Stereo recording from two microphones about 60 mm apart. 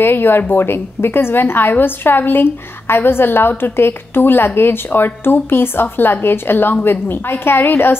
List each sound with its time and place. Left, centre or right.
0.0 s a woman's voice: left